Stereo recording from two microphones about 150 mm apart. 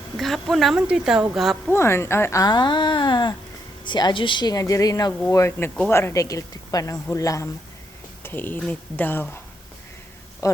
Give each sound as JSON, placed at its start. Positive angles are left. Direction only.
{"t": 0.2, "sound": "speech", "side_deg": 0}
{"t": 1.7, "sound": "speech", "side_deg": 15}
{"t": 10.4, "sound": "speech", "side_deg": 20}